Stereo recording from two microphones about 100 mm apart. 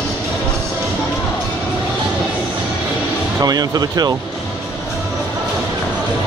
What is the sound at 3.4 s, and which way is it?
Speech, 40° right (ahead or behind).